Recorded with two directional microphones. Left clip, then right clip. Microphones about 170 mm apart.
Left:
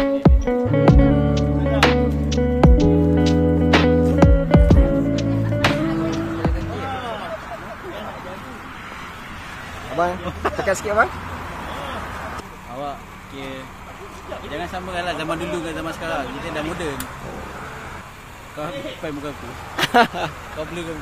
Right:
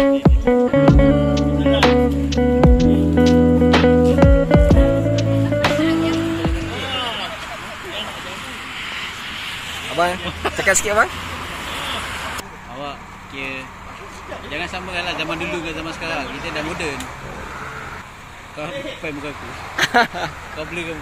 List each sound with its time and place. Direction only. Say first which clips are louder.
0.0 s music: right 3 dB; centre (ahead or behind)
9.9 s vehicle: right 2 dB; centre (ahead or behind)
14.5 s speech: right 2 dB; 15° left (ahead or behind)
19.8 s a sound: even; 15° left (ahead or behind)